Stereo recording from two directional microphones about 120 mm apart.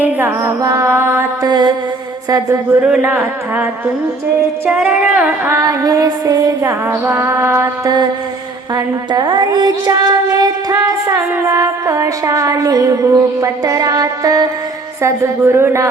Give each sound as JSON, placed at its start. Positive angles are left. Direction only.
{"t": 0.0, "sound": "music", "side_deg": -15}
{"t": 0.6, "sound": "child singing", "side_deg": -25}
{"t": 1.4, "sound": "mantra", "side_deg": -35}
{"t": 2.8, "sound": "a woman's voice", "side_deg": -10}
{"t": 4.8, "sound": "a woman's voice", "side_deg": -10}
{"t": 5.5, "sound": "child singing", "side_deg": -30}
{"t": 8.7, "sound": "child singing", "side_deg": -35}